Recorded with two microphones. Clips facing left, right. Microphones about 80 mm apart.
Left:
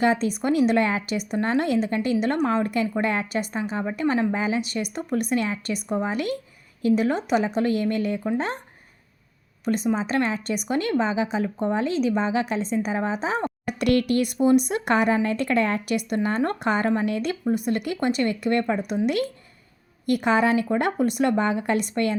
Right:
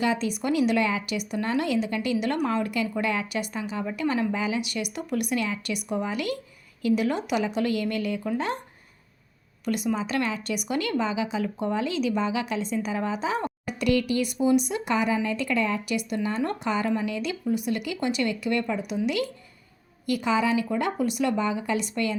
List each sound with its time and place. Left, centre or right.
0.0 s a woman's voice: left
9.6 s a woman's voice: left
13.7 s speech: left